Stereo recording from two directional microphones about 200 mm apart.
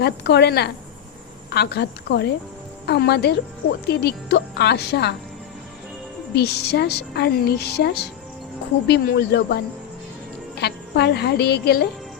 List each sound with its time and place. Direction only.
0.0 s a woman's voice: 55° left (ahead or behind)
6.3 s a woman's voice: 55° left (ahead or behind)
10.6 s a woman's voice: 55° left (ahead or behind)